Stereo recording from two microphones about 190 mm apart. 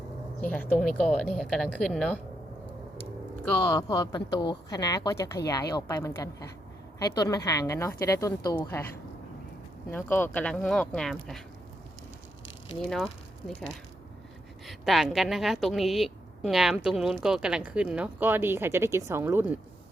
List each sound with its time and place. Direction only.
0.4 s a woman's voice: 10° left (ahead or behind)
3.4 s a woman's voice: 10° left (ahead or behind)
3.8 s a woman's voice: 20° left (ahead or behind)
9.9 s a woman's voice: 10° left (ahead or behind)
14.7 s a woman's voice: centre (ahead or behind)